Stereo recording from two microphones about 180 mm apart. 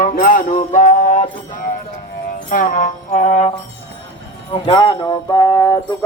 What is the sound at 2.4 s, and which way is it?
Music, 45° left (ahead or behind).